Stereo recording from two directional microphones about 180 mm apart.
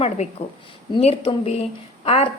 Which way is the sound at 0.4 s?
40° left (ahead or behind).